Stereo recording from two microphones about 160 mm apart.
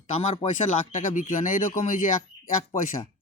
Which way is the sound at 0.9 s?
50° left (ahead or behind).